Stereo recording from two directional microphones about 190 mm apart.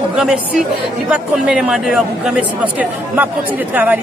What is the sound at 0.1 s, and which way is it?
Speech, 5° right (ahead or behind).